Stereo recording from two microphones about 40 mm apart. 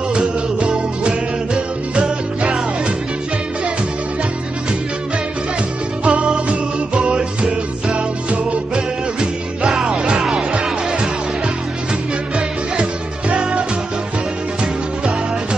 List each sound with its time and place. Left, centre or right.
0.1 s music: right
6.0 s music: right
8.7 s music: centre
13.3 s music: right